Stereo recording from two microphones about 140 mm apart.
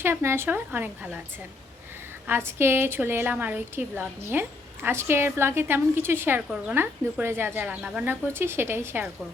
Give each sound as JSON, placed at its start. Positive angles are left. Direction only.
{"t": 0.0, "sound": "a woman's voice", "side_deg": -15}
{"t": 2.2, "sound": "a woman's voice", "side_deg": -15}